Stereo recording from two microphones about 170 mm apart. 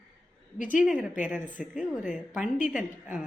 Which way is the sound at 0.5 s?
50° left (ahead or behind).